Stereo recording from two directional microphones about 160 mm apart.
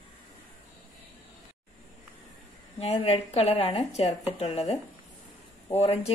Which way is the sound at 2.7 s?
40° left (ahead or behind).